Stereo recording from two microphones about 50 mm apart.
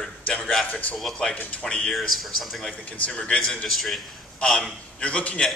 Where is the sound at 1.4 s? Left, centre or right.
Left.